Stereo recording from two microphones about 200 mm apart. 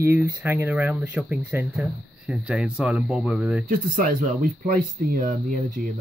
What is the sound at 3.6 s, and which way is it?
Speech, 40° right (ahead or behind).